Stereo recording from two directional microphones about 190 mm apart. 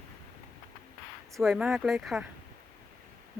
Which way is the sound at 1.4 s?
Centre (ahead or behind).